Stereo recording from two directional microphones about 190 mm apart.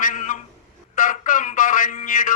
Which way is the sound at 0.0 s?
45° left (ahead or behind).